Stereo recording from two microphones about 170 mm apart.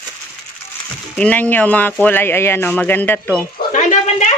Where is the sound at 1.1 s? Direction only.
10° left (ahead or behind).